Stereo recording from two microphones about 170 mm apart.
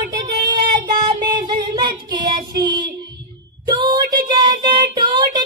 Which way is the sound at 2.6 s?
25° right (ahead or behind).